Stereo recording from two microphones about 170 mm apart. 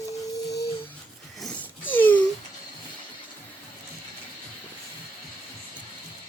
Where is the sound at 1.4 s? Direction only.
10° left (ahead or behind).